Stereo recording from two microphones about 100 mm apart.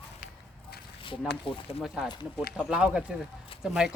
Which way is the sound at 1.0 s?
60° left (ahead or behind).